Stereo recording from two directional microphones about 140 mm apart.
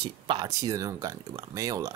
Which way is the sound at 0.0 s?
30° right (ahead or behind).